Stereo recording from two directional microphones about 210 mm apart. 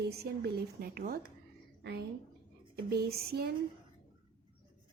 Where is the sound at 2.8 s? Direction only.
50° right (ahead or behind).